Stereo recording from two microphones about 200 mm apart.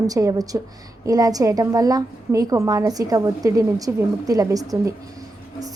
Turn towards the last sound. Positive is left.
turn(degrees=-15)  # may be behind; listen again after turning